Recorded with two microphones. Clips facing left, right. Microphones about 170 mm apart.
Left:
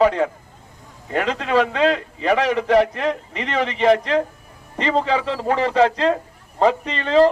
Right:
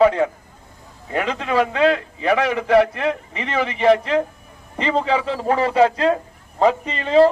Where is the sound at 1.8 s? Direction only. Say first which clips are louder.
Right 1 dB; 35° left (ahead or behind).